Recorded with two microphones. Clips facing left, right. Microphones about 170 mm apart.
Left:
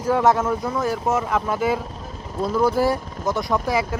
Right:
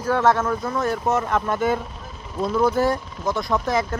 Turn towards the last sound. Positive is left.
turn(degrees=10)  # may be behind; listen again after turning